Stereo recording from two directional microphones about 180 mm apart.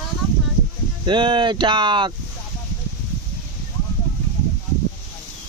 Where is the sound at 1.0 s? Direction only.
25° right (ahead or behind).